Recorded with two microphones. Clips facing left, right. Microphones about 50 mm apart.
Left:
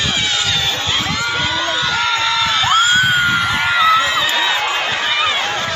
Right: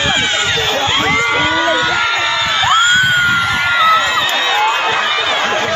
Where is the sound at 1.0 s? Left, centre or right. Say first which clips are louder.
Right 6 dB; right.